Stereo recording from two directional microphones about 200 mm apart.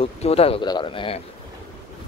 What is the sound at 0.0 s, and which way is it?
Speech, 30° left (ahead or behind).